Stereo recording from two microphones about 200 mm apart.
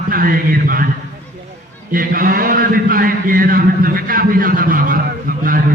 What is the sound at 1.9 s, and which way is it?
A man's voice, 45° right (ahead or behind).